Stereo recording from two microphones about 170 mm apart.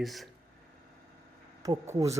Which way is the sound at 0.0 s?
Centre (ahead or behind).